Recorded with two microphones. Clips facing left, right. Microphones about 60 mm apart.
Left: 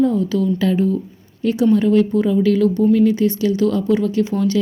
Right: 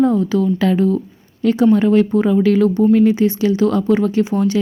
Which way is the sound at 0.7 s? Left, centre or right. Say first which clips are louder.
Right 2 dB; right.